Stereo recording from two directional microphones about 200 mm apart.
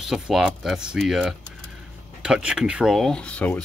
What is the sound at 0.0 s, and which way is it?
Speech, centre (ahead or behind).